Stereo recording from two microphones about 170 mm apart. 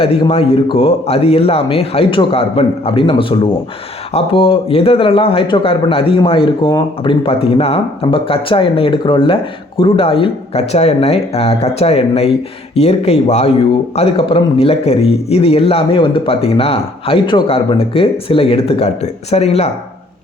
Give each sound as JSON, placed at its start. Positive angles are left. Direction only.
{"t": 0.0, "sound": "speech", "side_deg": 35}